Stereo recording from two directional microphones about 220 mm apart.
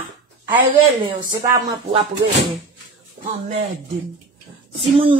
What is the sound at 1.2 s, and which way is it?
Speech, 20° right (ahead or behind).